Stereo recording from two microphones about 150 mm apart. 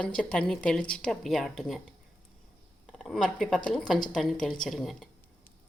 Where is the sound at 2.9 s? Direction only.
Centre (ahead or behind).